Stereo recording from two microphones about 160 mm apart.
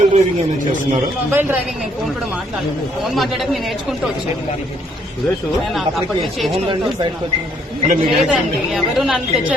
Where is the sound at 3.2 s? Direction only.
Centre (ahead or behind).